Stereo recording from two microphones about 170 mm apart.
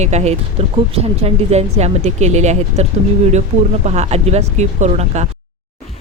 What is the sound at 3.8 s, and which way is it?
Speech, 40° right (ahead or behind).